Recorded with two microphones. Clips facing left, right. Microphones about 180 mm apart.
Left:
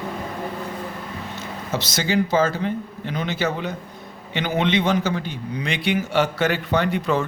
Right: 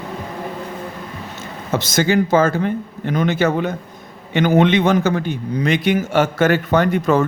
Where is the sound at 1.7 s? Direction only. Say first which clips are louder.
Right 7 dB; 50° right (ahead or behind).